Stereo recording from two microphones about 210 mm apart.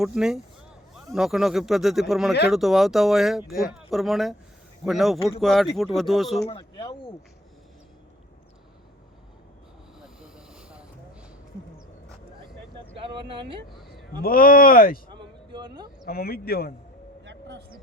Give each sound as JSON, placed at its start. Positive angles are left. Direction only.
{"t": 0.0, "sound": "speech", "side_deg": -5}
{"t": 6.5, "sound": "speech", "side_deg": 20}
{"t": 10.0, "sound": "vehicle", "side_deg": -5}
{"t": 13.7, "sound": "a sound", "side_deg": 0}
{"t": 14.2, "sound": "speech", "side_deg": 45}
{"t": 15.1, "sound": "a sound", "side_deg": -20}
{"t": 16.0, "sound": "speech", "side_deg": 45}
{"t": 17.2, "sound": "vehicle", "side_deg": -55}